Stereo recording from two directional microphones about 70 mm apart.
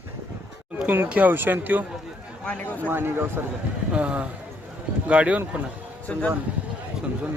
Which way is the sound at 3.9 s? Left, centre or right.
Centre.